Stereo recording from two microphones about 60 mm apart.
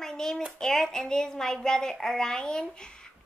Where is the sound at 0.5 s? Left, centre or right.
Centre.